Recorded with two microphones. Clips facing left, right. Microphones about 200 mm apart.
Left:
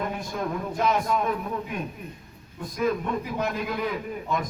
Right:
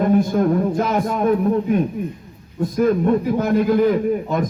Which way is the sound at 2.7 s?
45° right (ahead or behind).